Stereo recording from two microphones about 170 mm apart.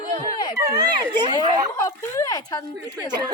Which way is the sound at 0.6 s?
25° right (ahead or behind).